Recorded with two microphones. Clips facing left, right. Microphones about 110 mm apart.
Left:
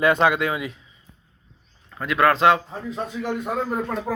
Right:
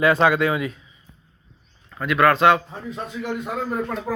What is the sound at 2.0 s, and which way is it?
Speech, 25° left (ahead or behind).